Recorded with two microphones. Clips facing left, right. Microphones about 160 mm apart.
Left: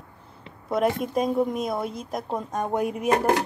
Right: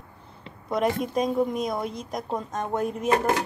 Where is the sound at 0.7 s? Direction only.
Centre (ahead or behind).